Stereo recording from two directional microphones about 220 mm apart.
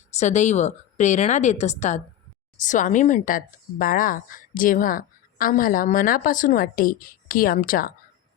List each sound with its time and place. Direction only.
0.1 s a woman's voice: 30° left (ahead or behind)